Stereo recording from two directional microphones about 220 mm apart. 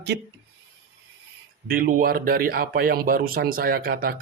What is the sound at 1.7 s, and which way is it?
Speech, 40° right (ahead or behind).